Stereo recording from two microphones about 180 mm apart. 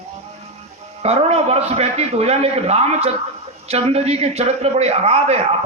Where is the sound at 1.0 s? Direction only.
35° right (ahead or behind).